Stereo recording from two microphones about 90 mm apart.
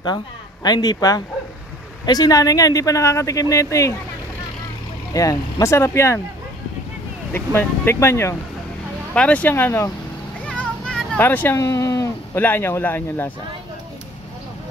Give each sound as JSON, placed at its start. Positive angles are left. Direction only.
{"t": 0.7, "sound": "speech", "side_deg": 50}
{"t": 5.1, "sound": "speech", "side_deg": 40}
{"t": 7.3, "sound": "speech", "side_deg": 25}
{"t": 9.1, "sound": "speech", "side_deg": 15}
{"t": 10.4, "sound": "vehicle", "side_deg": 10}
{"t": 11.1, "sound": "speech", "side_deg": 20}
{"t": 11.5, "sound": "speech", "side_deg": 35}
{"t": 12.4, "sound": "speech", "side_deg": 25}